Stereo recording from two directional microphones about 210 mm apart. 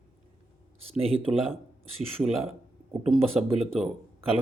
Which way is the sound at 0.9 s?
30° right (ahead or behind).